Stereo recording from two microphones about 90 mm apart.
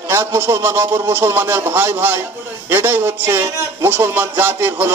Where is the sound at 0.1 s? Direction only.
25° right (ahead or behind).